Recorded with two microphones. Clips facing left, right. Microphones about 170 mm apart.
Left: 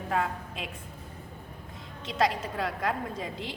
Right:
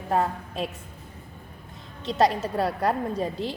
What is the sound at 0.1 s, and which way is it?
Speech, 35° right (ahead or behind).